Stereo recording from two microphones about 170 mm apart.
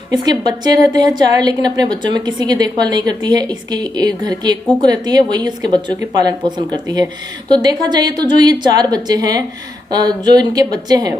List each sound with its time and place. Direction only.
0.1 s a woman's voice: 25° right (ahead or behind)